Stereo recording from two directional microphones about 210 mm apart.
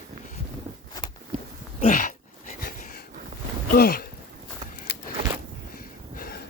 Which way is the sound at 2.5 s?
45° left (ahead or behind).